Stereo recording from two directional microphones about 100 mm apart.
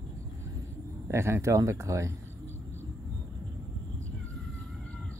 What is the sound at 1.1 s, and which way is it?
Speech, 25° right (ahead or behind).